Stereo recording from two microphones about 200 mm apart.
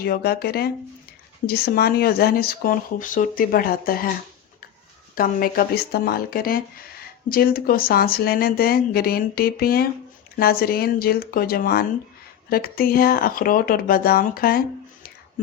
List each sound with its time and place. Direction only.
0.0 s speech: 50° left (ahead or behind)
5.1 s speech: 45° left (ahead or behind)